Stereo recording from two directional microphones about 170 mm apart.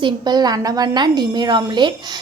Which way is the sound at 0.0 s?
25° right (ahead or behind).